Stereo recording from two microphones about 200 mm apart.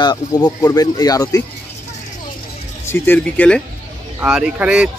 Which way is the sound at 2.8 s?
10° left (ahead or behind).